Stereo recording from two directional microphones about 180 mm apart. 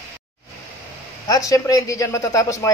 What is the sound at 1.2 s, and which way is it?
Speech, 20° left (ahead or behind).